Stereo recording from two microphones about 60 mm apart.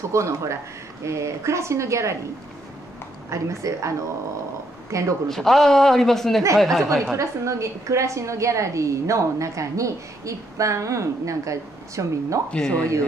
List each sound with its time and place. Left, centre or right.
0.1 s a woman's voice: right
3.3 s a woman's voice: right
4.9 s a woman's voice: right
5.3 s a woman's voice: centre
7.2 s a woman's voice: right
12.4 s a woman's voice: centre